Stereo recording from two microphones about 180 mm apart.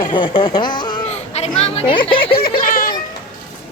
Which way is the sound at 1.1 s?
35° left (ahead or behind).